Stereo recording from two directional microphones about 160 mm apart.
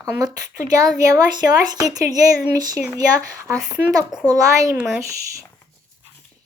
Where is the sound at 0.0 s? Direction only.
20° right (ahead or behind).